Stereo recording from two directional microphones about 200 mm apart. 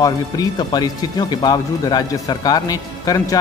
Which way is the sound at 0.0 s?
20° left (ahead or behind).